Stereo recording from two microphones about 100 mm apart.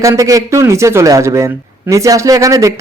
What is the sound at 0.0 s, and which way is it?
Speech, 35° right (ahead or behind).